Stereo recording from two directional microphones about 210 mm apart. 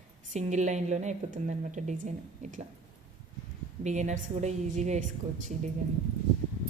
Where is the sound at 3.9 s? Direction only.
35° right (ahead or behind).